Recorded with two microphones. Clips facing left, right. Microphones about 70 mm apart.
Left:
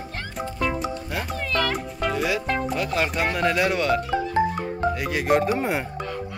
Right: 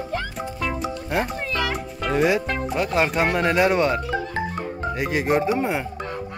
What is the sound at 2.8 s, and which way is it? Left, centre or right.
Speech, right.